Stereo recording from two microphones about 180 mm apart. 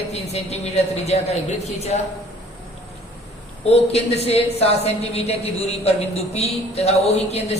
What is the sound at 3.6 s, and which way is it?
A woman's voice, 35° left (ahead or behind).